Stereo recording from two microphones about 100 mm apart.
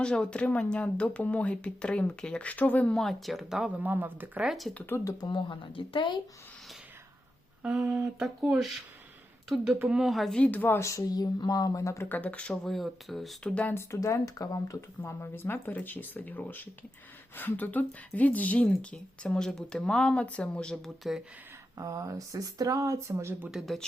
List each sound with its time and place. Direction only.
0.0 s a woman's voice: 10° left (ahead or behind)
3.8 s speech: 20° right (ahead or behind)
4.4 s speech: centre (ahead or behind)
5.2 s speech: 50° left (ahead or behind)
7.6 s a sound: 10° right (ahead or behind)
8.4 s speech: 5° right (ahead or behind)
9.9 s speech: 5° right (ahead or behind)
10.3 s speech: 15° left (ahead or behind); by 12.0 s 30° left (ahead or behind)
12.0 s a woman's voice: 15° left (ahead or behind); by 13.5 s centre (ahead or behind)
13.5 s a woman's voice: 15° left (ahead or behind)
13.7 s a woman's voice: 30° left (ahead or behind); by 21.2 s centre (ahead or behind)
21.8 s speech: 35° right (ahead or behind)
23.5 s speech: centre (ahead or behind)